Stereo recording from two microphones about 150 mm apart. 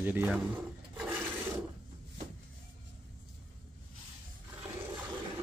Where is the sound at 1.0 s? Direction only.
15° right (ahead or behind).